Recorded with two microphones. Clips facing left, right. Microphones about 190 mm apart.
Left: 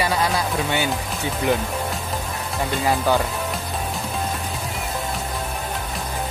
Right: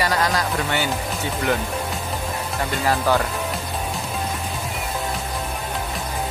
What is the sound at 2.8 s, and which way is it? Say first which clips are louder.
Speech: even; 10° left (ahead or behind).